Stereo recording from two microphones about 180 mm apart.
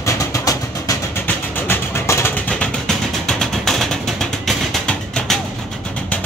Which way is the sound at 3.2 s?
5° left (ahead or behind).